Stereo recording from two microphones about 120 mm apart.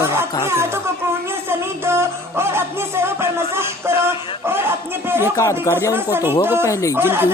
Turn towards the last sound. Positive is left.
turn(degrees=-20)  # may be behind; listen again after turning